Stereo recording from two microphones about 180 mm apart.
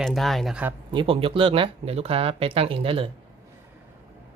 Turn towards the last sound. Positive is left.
turn(degrees=-30)  # may be behind; listen again after turning